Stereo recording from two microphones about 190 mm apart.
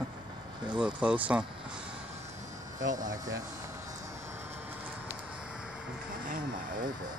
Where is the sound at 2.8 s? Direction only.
45° right (ahead or behind).